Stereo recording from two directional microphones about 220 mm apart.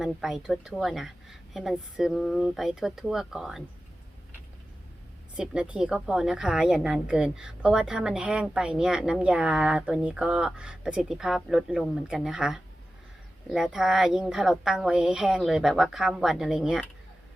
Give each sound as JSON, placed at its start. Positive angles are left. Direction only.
{"t": 0.0, "sound": "a woman's voice", "side_deg": 0}
{"t": 5.4, "sound": "a woman's voice", "side_deg": -5}